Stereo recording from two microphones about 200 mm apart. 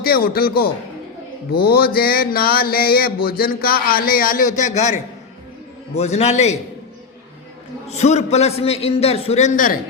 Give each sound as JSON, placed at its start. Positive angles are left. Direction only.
{"t": 0.0, "sound": "mantra", "side_deg": 50}
{"t": 6.0, "sound": "a man's voice", "side_deg": 35}
{"t": 7.9, "sound": "a man's voice", "side_deg": 35}